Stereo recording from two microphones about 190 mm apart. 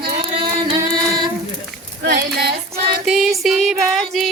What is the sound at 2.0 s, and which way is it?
Child singing, 60° right (ahead or behind).